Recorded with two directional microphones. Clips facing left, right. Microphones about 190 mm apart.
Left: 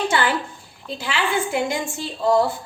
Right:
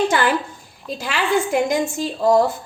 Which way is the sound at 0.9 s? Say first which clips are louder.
Right 3 dB; 45° right (ahead or behind).